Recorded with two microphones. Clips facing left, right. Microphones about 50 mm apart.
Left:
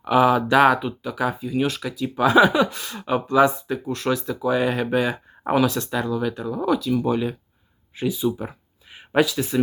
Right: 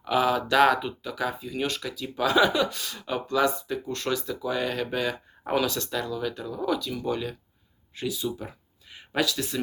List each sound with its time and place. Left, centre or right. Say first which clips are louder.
0.0 s speech: left 6 dB; centre